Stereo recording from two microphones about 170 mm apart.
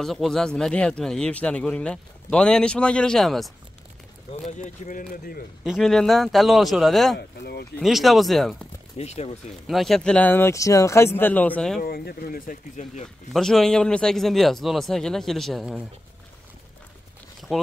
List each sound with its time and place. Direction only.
0.0 s a man's voice: centre (ahead or behind)
4.5 s speech: 45° left (ahead or behind)
5.6 s a man's voice: centre (ahead or behind)
7.2 s speech: 70° left (ahead or behind)
7.8 s a man's voice: centre (ahead or behind)
8.9 s speech: 40° left (ahead or behind)
9.7 s speech: centre (ahead or behind)
11.8 s speech: 65° left (ahead or behind)
13.3 s a man's voice: centre (ahead or behind)